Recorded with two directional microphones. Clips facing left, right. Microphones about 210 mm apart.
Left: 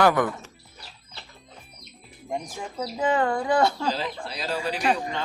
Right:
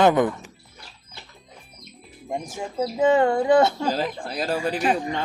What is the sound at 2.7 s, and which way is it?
Chicken, 25° right (ahead or behind).